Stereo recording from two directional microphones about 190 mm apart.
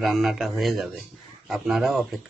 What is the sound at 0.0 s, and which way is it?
Speech, centre (ahead or behind).